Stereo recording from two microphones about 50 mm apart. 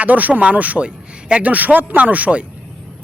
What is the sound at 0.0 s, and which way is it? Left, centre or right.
Speech, right.